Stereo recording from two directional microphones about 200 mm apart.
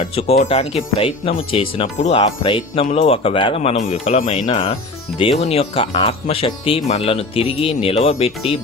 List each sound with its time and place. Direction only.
0.0 s speech: 30° left (ahead or behind)